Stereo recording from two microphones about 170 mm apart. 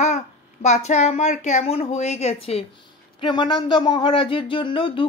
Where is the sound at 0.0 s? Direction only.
45° left (ahead or behind).